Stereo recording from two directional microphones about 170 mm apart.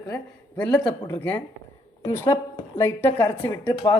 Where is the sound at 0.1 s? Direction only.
5° left (ahead or behind).